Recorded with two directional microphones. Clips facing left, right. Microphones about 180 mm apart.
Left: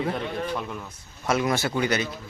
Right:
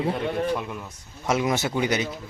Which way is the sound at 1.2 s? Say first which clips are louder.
Even; 20° right (ahead or behind).